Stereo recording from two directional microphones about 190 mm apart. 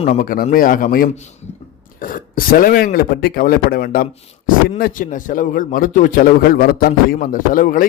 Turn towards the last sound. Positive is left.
turn(degrees=45)  # may be behind; listen again after turning